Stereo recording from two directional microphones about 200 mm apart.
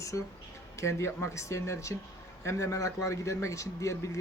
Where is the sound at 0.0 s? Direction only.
15° left (ahead or behind).